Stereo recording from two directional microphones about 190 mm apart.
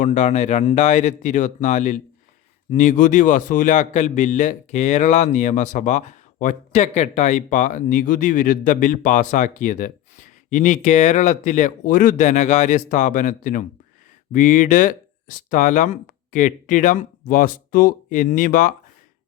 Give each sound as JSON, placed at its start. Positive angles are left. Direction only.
{"t": 0.0, "sound": "a man's voice", "side_deg": 40}